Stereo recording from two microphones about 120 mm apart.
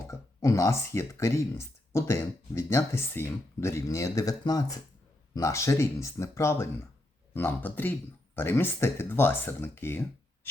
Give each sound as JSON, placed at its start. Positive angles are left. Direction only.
{"t": 0.1, "sound": "speech", "side_deg": 25}